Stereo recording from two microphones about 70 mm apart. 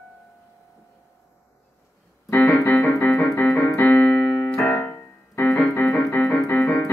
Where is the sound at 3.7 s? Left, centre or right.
Left.